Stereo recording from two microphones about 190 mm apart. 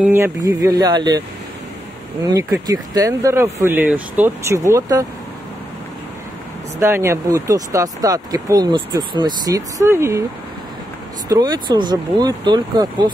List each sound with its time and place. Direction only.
0.0 s speech: 15° right (ahead or behind)
2.2 s speech: 20° right (ahead or behind)
6.8 s speech: 15° right (ahead or behind)
11.2 s speech: 20° right (ahead or behind)